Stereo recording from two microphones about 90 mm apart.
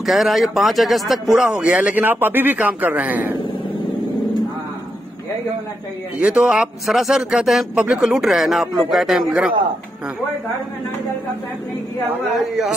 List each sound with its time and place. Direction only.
0.0 s speech: centre (ahead or behind)
1.6 s speech: 15° right (ahead or behind)
6.1 s speech: 10° right (ahead or behind)
8.0 s speech: 5° right (ahead or behind)